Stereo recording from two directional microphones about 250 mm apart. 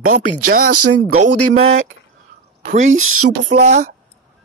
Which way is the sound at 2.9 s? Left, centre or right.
Right.